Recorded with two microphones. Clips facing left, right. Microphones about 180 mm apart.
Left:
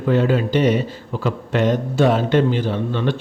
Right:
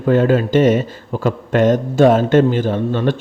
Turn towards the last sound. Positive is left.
turn(degrees=-45)  # may be behind; listen again after turning